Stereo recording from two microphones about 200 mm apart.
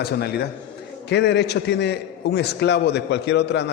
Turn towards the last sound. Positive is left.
turn(degrees=60)  # may be behind; listen again after turning